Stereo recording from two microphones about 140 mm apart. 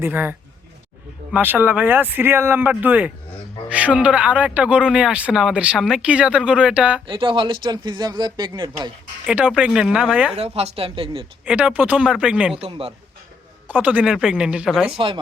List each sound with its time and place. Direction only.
0.0 s speech: 15° right (ahead or behind)
7.1 s speech: 35° right (ahead or behind)
9.2 s speech: 10° right (ahead or behind)
10.3 s speech: 45° right (ahead or behind)
11.4 s speech: 5° right (ahead or behind)
12.6 s speech: 45° right (ahead or behind)
13.7 s speech: 10° right (ahead or behind)
14.9 s speech: 40° right (ahead or behind)